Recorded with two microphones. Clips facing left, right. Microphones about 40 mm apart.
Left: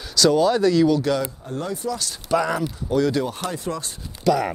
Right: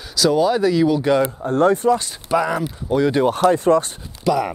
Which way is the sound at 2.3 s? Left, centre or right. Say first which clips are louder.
Right 2 dB; centre.